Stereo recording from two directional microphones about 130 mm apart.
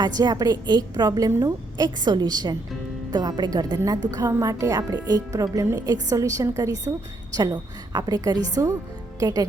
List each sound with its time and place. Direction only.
0.0 s a woman's voice: 30° right (ahead or behind)